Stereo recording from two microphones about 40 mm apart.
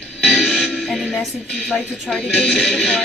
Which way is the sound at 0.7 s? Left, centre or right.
Centre.